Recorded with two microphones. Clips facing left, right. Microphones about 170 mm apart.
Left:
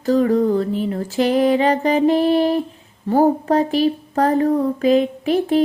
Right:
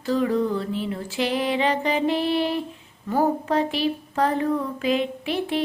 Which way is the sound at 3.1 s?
35° left (ahead or behind).